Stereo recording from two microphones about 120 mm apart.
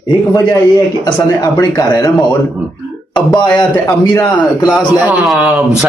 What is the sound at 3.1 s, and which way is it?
A man's voice, 40° left (ahead or behind).